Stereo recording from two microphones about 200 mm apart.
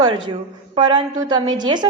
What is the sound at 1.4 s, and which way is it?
Speech, 25° right (ahead or behind).